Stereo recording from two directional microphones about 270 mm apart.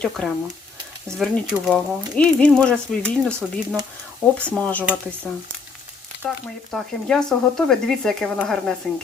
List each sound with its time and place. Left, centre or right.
0.2 s speech: centre